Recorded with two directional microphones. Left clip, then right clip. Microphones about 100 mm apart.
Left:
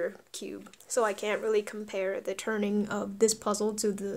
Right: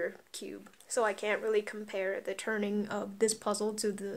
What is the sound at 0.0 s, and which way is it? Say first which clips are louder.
Speech: left 3 dB; 25° left (ahead or behind).